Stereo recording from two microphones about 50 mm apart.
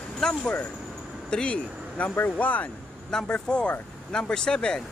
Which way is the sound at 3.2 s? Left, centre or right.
Left.